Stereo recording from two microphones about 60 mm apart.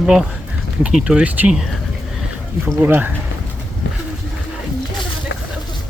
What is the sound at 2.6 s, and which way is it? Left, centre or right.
Speech, right.